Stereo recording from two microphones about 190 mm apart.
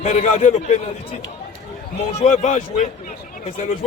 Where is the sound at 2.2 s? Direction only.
40° left (ahead or behind).